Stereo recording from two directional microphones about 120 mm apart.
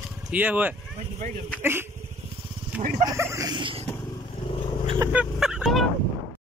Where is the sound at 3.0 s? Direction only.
25° right (ahead or behind).